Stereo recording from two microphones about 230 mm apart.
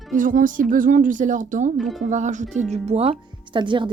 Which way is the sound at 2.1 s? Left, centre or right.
Right.